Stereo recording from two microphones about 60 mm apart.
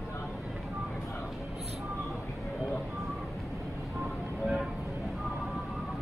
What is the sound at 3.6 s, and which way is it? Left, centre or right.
Vehicle, centre.